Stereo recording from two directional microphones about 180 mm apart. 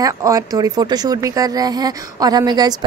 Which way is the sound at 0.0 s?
20° right (ahead or behind).